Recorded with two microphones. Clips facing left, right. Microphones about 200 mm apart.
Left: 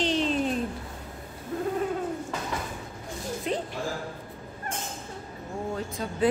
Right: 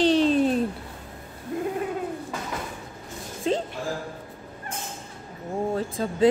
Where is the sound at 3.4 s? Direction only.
30° right (ahead or behind).